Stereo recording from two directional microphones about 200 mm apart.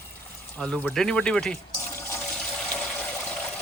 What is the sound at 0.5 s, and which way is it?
Water, 5° left (ahead or behind).